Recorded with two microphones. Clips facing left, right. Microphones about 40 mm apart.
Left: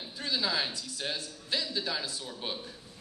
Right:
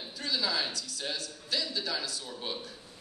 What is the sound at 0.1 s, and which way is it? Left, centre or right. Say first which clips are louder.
A man's voice: left 1 dB; centre.